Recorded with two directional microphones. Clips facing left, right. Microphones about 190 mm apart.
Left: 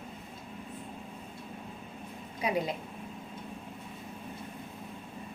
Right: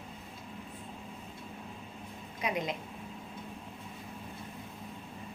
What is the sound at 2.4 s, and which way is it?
Speech, 35° left (ahead or behind).